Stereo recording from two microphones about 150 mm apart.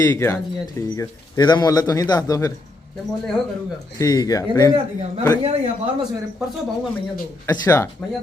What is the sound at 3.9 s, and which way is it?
Speech, 25° left (ahead or behind).